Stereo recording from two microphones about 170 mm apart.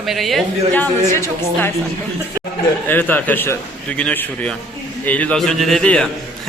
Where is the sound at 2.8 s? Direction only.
10° left (ahead or behind).